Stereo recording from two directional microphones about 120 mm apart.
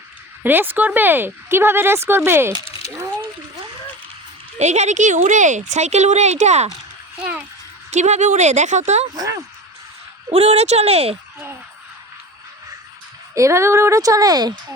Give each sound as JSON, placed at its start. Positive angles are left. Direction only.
{"t": 0.4, "sound": "speech", "side_deg": -15}
{"t": 4.5, "sound": "speech", "side_deg": -70}
{"t": 7.9, "sound": "speech", "side_deg": -75}
{"t": 9.1, "sound": "speech", "side_deg": -30}
{"t": 10.3, "sound": "speech", "side_deg": -65}
{"t": 13.3, "sound": "speech", "side_deg": -25}